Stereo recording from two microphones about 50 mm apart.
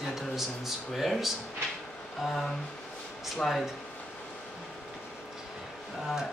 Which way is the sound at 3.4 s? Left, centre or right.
Centre.